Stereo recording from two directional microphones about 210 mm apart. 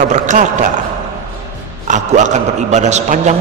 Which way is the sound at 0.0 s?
35° right (ahead or behind).